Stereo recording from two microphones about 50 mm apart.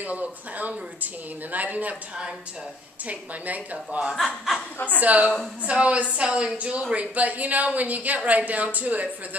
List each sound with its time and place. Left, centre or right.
0.0 s speech: right
3.1 s speech: right
4.6 s speech: left
5.0 s speech: right